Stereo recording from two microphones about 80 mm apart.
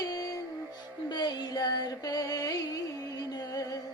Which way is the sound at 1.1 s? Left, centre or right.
Left.